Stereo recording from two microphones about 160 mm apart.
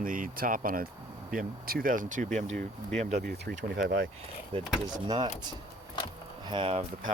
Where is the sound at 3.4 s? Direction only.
90° right.